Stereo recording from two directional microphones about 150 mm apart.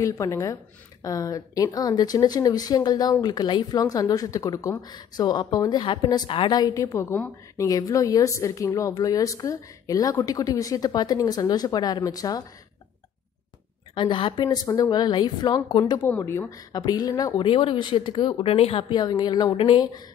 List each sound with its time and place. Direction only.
0.0 s speech: 20° left (ahead or behind)
13.9 s speech: 35° left (ahead or behind)
16.0 s speech: 15° left (ahead or behind)